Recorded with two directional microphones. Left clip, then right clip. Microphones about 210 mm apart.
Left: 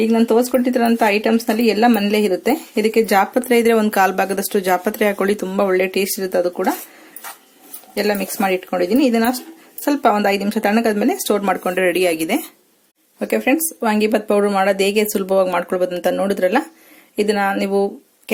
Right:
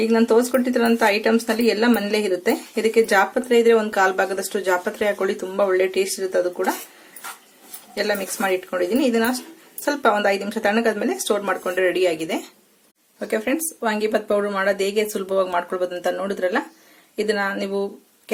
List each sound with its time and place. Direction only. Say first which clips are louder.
0.0 s speech: left 2 dB; 25° left (ahead or behind)
7.9 s speech: left 4 dB; 30° left (ahead or behind)